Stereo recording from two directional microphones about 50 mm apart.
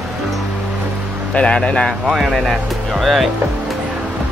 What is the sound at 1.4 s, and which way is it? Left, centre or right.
Speech, left.